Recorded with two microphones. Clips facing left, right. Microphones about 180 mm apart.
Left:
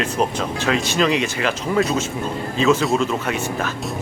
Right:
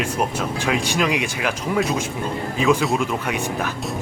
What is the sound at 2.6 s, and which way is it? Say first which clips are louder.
Speech: left 2 dB; 15° right (ahead or behind).